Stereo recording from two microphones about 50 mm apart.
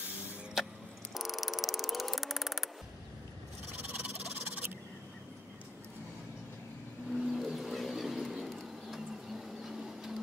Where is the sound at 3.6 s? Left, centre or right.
Right.